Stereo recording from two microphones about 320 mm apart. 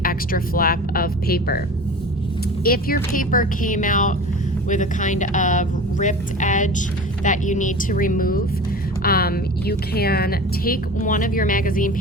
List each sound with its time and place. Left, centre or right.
0.0 s a woman's voice: left
2.6 s a woman's voice: left